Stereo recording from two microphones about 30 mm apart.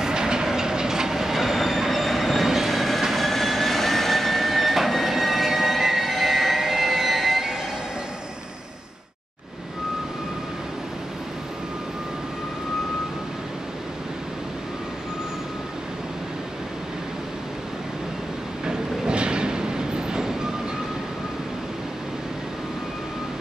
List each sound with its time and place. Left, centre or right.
0.0 s train: right
2.7 s train: centre
3.2 s vehicle: centre
18.7 s train: right